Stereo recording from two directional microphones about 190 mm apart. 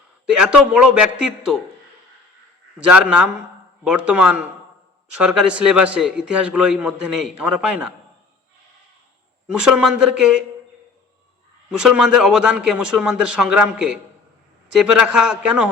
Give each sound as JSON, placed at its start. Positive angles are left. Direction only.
{"t": 0.3, "sound": "a man's voice", "side_deg": -5}
{"t": 2.9, "sound": "a man's voice", "side_deg": -5}
{"t": 9.5, "sound": "a man's voice", "side_deg": -5}
{"t": 11.8, "sound": "a man's voice", "side_deg": -5}